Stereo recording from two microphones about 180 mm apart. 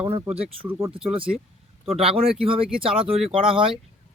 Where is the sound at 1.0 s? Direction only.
30° right (ahead or behind).